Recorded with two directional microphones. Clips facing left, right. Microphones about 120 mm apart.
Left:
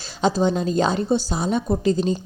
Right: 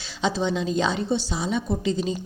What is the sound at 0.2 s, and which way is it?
A woman's voice, 45° left (ahead or behind).